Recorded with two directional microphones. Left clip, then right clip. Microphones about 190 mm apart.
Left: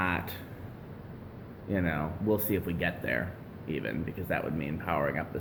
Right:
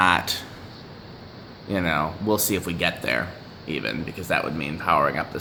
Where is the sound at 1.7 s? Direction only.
35° right (ahead or behind).